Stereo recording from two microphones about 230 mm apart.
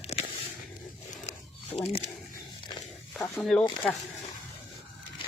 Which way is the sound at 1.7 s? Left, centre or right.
Left.